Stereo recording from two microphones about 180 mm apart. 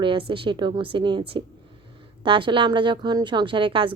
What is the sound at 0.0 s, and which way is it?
A woman's voice, 30° right (ahead or behind).